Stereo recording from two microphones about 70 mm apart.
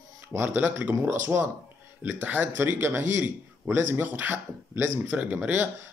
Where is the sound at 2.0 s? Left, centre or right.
Right.